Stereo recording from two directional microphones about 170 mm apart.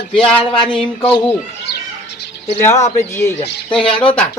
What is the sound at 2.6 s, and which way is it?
Speech, 15° left (ahead or behind).